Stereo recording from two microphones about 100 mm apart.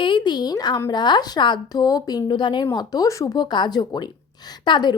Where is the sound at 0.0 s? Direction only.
50° left (ahead or behind).